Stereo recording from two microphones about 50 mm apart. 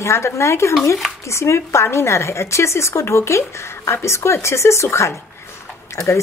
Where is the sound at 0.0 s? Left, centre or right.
Left.